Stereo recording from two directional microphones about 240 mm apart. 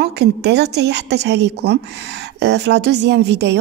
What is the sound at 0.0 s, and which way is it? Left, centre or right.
A woman's voice, right.